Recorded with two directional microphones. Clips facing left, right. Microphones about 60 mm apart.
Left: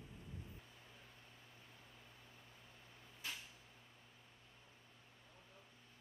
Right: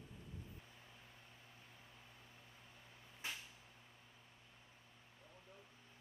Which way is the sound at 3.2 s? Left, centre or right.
Right.